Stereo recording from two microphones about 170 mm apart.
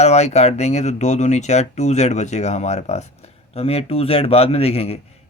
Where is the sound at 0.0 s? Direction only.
40° left (ahead or behind).